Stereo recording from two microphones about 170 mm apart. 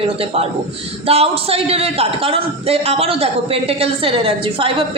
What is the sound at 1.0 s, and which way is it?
A woman's voice, 35° right (ahead or behind).